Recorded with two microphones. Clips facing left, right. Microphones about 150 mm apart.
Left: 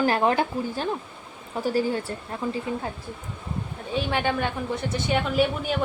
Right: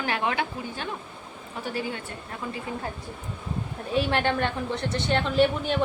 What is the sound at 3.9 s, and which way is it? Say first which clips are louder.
A woman's voice: right 1 dB; centre (ahead or behind).